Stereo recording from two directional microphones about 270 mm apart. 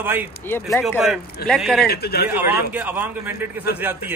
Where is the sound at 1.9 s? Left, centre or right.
Left.